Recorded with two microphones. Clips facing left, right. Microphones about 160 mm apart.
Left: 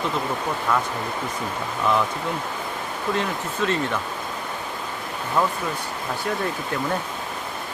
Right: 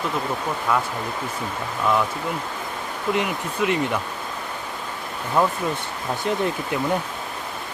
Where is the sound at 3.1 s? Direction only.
15° right (ahead or behind).